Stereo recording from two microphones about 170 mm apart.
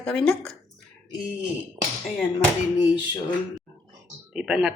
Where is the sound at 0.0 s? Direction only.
5° left (ahead or behind).